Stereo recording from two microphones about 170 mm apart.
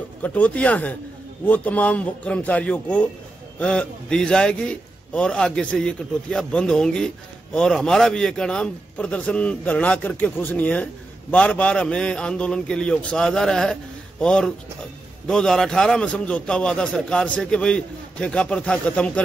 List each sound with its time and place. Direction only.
0.2 s a man's voice: 10° left (ahead or behind)